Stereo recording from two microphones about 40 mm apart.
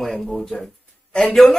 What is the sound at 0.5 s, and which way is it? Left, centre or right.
Speech, left.